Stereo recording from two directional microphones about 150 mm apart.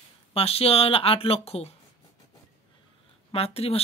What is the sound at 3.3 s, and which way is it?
Speech, 40° left (ahead or behind).